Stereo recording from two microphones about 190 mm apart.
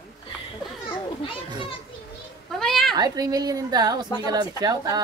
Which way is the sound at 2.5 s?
Centre (ahead or behind).